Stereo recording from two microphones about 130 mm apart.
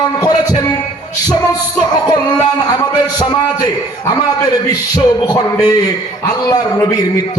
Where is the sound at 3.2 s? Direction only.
30° left (ahead or behind).